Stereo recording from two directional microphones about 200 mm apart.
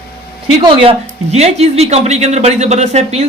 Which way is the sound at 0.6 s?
25° right (ahead or behind).